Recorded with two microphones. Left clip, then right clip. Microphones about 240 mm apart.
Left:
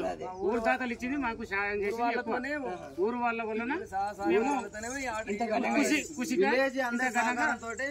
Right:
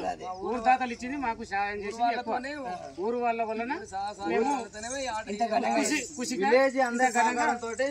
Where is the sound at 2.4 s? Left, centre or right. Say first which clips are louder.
Left 1 dB; centre.